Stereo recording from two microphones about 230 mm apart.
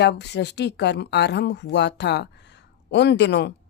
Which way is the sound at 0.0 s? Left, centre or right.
Left.